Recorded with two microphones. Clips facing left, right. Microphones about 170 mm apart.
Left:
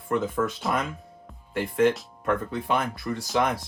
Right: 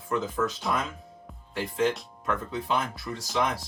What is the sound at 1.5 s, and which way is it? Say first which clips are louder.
Speech: left 5 dB; 55° left (ahead or behind).